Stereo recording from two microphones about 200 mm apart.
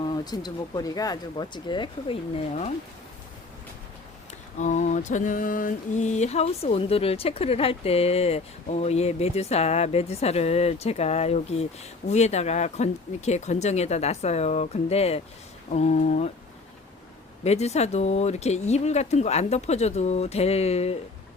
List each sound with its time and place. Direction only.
0.3 s speech: 20° left (ahead or behind)
4.5 s mantra: 35° left (ahead or behind)
17.4 s mantra: 35° left (ahead or behind)